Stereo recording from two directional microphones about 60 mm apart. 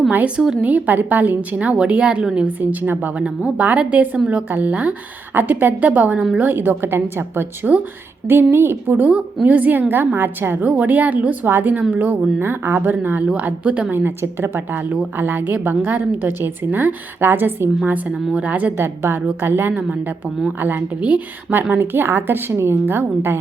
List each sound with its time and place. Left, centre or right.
0.3 s a woman's voice: centre
0.7 s a woman's voice: right
9.0 s a woman's voice: right
10.2 s a woman's voice: right
10.7 s a woman's voice: right
12.4 s a woman's voice: right
13.7 s a woman's voice: centre
13.9 s a woman's voice: right
18.3 s a woman's voice: right
18.8 s a woman's voice: right
21.7 s a woman's voice: right